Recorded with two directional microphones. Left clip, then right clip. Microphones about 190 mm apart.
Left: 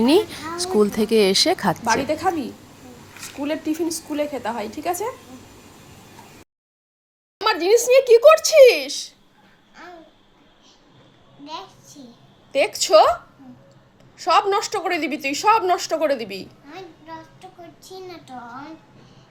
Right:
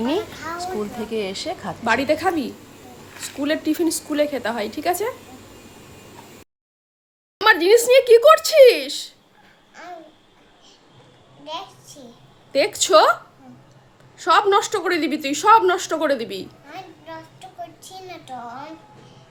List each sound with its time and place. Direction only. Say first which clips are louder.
0.8 s speech: left 9 dB; 25° left (ahead or behind)
1.8 s a woman's voice: right 1 dB; 15° right (ahead or behind)
7.3 s speech: right 3 dB; 10° right (ahead or behind)
11.4 s a sound: right 3 dB; 20° right (ahead or behind)
12.5 s a woman's voice: even; 5° right (ahead or behind)
14.2 s a woman's voice: right 2 dB; 5° right (ahead or behind)
17.9 s a child's voice: even; 20° right (ahead or behind)